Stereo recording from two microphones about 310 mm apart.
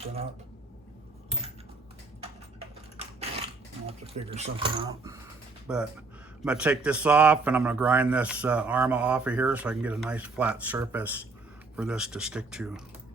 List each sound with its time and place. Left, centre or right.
3.8 s a man's voice: centre